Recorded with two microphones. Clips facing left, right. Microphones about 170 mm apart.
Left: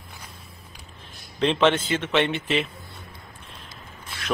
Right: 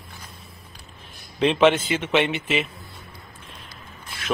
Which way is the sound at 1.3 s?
10° right (ahead or behind).